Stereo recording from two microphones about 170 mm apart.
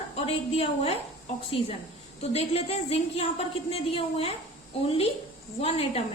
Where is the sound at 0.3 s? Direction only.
35° left (ahead or behind).